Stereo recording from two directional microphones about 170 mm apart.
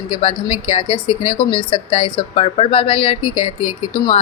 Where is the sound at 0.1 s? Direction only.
35° left (ahead or behind).